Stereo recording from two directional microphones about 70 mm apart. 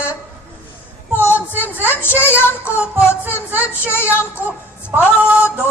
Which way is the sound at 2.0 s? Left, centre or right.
Left.